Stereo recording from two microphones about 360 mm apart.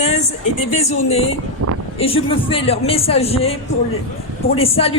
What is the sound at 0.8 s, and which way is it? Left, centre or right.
A man's voice, centre.